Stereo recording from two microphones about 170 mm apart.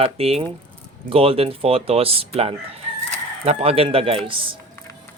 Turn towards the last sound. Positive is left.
turn(degrees=-30)  # may be behind; listen again after turning